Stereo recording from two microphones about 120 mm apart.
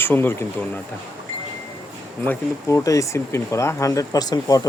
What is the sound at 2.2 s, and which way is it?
Speech, 25° left (ahead or behind).